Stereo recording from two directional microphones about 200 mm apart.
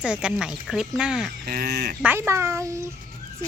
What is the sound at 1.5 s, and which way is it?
Speech, 50° right (ahead or behind).